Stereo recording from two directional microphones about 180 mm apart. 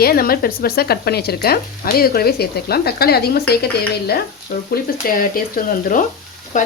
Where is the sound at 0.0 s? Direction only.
55° left (ahead or behind).